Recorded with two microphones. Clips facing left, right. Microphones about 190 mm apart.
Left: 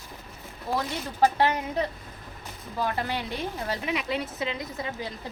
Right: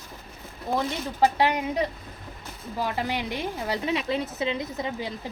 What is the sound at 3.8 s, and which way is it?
Speech, 30° right (ahead or behind).